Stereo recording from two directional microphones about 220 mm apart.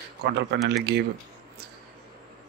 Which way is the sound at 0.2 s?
50° right (ahead or behind).